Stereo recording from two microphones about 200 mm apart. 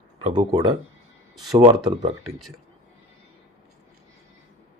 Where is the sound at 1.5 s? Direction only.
20° right (ahead or behind).